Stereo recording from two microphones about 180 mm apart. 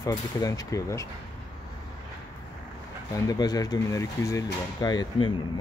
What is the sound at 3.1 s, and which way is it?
Speech, 20° left (ahead or behind).